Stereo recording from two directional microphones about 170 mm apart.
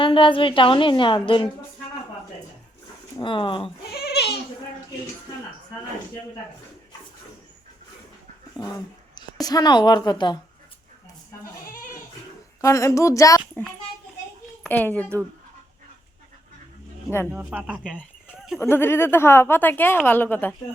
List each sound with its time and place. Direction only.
0.0 s a woman's voice: 30° left (ahead or behind)
3.2 s a woman's voice: 30° left (ahead or behind)
3.9 s goat: 70° left (ahead or behind)
8.6 s speech: 5° right (ahead or behind)
9.1 s a woman's voice: 25° left (ahead or behind)
12.6 s speech: 20° left (ahead or behind)
14.6 s a child's voice: 10° left (ahead or behind)
17.3 s speech: 10° right (ahead or behind)
18.4 s a sound: centre (ahead or behind)
18.7 s speech: 15° left (ahead or behind)